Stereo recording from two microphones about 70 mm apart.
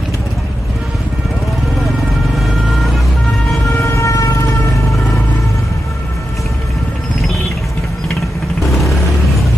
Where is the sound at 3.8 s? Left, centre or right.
Left.